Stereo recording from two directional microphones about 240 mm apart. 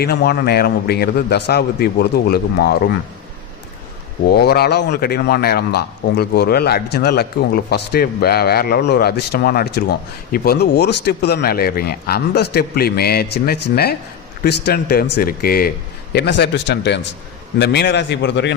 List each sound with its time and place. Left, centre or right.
0.0 s speech: left
4.3 s a man's voice: left